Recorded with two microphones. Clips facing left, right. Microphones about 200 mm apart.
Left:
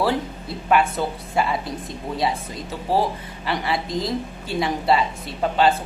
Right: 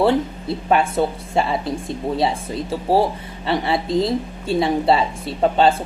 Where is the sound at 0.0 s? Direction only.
25° right (ahead or behind).